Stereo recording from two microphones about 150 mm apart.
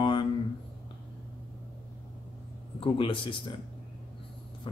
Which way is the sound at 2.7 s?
35° left (ahead or behind).